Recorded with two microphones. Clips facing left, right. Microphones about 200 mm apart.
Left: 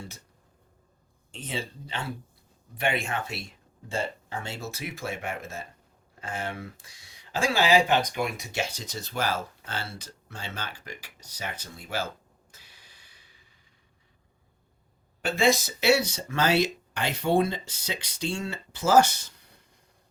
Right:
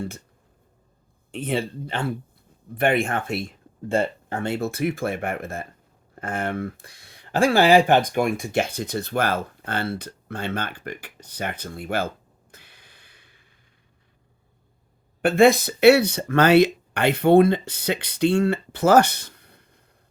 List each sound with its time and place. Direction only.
1.3 s speech: 55° right (ahead or behind)
12.5 s a sound: 55° right (ahead or behind)
15.2 s speech: 55° right (ahead or behind)